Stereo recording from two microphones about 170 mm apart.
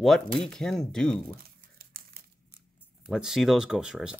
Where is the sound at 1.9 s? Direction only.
60° right (ahead or behind).